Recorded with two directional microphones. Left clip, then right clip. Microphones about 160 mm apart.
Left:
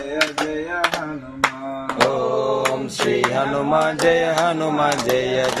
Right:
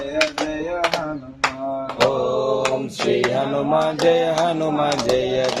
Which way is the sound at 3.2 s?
10° right (ahead or behind).